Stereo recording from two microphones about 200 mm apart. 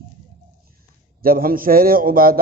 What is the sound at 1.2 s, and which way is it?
A man's voice, 45° right (ahead or behind).